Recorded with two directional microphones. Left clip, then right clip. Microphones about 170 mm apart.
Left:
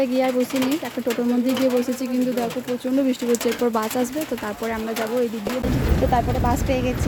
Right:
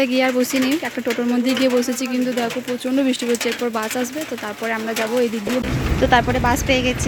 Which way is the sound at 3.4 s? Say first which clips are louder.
Even; 20° left (ahead or behind).